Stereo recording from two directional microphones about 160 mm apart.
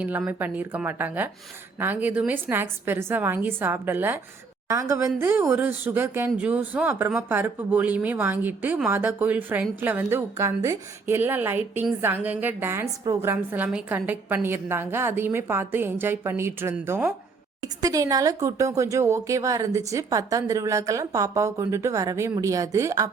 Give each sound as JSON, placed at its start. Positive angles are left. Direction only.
{"t": 0.0, "sound": "speech", "side_deg": -10}